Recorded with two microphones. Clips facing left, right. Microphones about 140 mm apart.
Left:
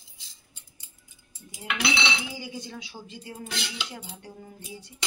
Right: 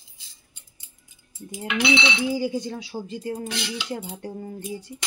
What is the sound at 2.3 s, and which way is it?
A woman's voice, 40° right (ahead or behind).